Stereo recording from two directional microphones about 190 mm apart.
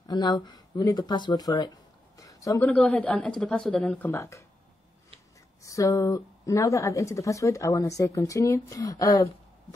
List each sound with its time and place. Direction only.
0.0 s speech: 20° left (ahead or behind)
5.6 s speech: 15° left (ahead or behind)